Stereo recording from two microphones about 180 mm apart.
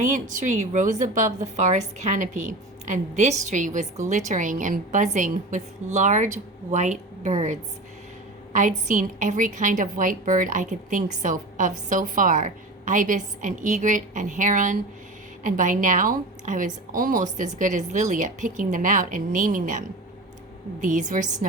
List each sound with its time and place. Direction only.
0.0 s a woman's voice: 45° right (ahead or behind)
20.8 s a woman's voice: 45° right (ahead or behind)